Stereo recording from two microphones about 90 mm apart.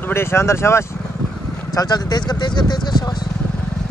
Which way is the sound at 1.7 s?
45° left (ahead or behind).